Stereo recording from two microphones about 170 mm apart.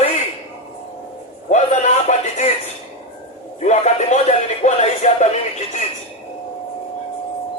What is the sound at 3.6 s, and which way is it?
Music, 45° left (ahead or behind).